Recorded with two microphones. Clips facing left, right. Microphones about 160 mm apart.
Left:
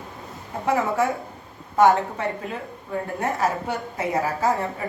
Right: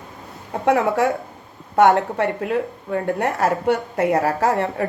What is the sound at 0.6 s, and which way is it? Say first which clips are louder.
A woman's voice: right 4 dB; 70° right (ahead or behind).